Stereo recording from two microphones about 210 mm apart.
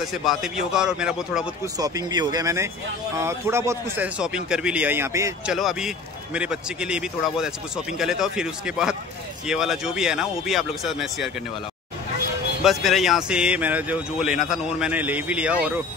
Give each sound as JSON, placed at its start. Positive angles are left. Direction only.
{"t": 0.1, "sound": "a man's voice", "side_deg": 0}
{"t": 1.8, "sound": "speech", "side_deg": -20}
{"t": 5.5, "sound": "a man's voice", "side_deg": 0}
{"t": 12.6, "sound": "a man's voice", "side_deg": 0}